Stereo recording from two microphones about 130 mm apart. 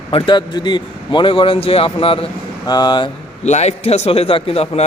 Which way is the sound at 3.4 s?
60° left (ahead or behind).